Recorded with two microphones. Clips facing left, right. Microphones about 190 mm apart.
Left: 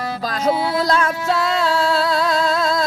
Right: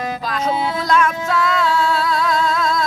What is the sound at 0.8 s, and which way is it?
Music, 35° left (ahead or behind).